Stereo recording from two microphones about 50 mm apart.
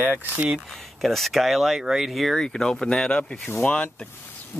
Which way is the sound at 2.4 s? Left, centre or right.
Centre.